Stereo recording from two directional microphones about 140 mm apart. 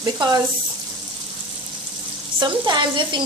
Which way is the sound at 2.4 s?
30° right (ahead or behind).